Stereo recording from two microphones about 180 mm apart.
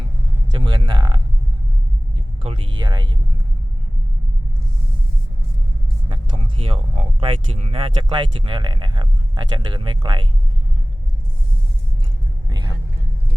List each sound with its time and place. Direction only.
0.6 s speech: 25° right (ahead or behind)
6.1 s speech: 30° right (ahead or behind)
12.5 s vehicle: 25° right (ahead or behind)